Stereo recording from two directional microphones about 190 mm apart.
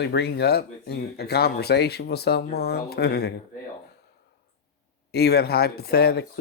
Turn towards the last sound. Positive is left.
turn(degrees=55)  # may be behind; listen again after turning